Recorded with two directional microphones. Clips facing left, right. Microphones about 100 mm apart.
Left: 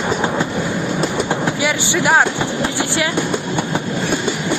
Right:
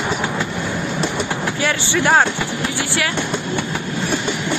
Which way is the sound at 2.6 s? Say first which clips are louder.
Left 2 dB; 20° left (ahead or behind).